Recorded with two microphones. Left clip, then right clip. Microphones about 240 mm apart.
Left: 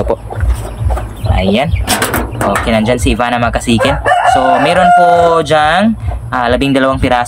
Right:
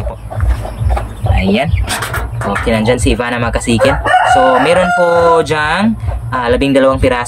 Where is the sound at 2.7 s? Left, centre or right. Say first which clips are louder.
Even; centre.